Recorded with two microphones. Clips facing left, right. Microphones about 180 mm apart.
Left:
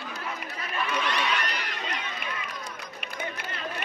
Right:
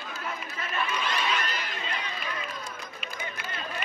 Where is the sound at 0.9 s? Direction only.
65° left (ahead or behind).